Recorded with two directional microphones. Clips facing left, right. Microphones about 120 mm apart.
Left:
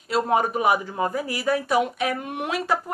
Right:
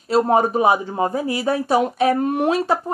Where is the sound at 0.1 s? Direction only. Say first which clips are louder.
Right 5 dB; 35° right (ahead or behind).